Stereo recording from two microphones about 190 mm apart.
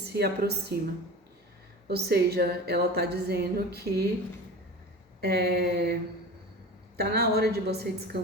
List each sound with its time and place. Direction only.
0.0 s a woman's voice: 60° right (ahead or behind)
1.9 s a woman's voice: 55° right (ahead or behind)
5.2 s a woman's voice: 55° right (ahead or behind)